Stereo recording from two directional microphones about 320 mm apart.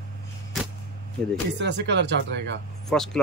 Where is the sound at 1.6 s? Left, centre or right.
Right.